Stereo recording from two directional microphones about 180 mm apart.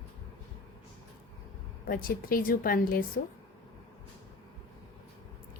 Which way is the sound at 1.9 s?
50° left (ahead or behind).